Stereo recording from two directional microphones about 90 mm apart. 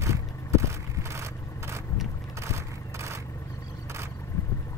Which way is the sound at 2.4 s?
30° right (ahead or behind).